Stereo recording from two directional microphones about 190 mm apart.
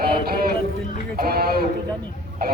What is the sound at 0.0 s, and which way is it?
Music, 55° right (ahead or behind).